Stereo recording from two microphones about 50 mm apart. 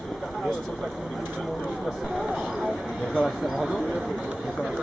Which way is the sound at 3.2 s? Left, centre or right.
Centre.